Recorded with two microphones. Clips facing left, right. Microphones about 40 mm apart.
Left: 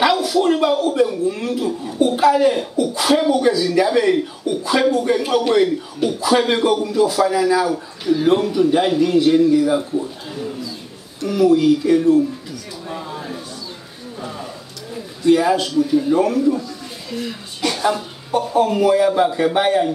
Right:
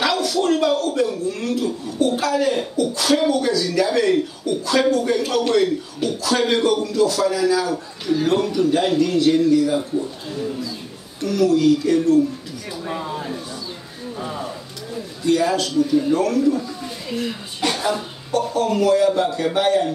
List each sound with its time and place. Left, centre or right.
0.0 s speech: centre
11.2 s speech: centre
15.2 s speech: centre
17.1 s speech: centre
18.3 s speech: centre